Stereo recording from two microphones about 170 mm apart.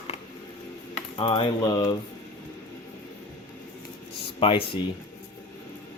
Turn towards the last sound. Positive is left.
turn(degrees=30)  # may be behind; listen again after turning